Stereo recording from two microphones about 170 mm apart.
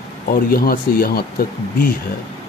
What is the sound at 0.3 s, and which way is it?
Speech, 60° left (ahead or behind).